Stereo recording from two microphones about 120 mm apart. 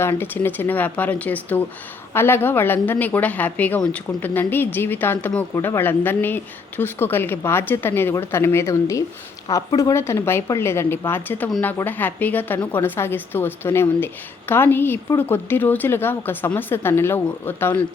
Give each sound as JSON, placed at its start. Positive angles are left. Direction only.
{"t": 0.0, "sound": "a woman's voice", "side_deg": 20}